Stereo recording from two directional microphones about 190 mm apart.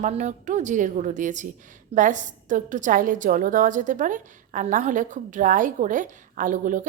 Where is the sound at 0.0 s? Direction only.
40° right (ahead or behind).